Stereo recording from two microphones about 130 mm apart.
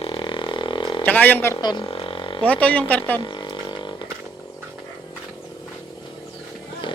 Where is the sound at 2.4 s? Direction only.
10° left (ahead or behind).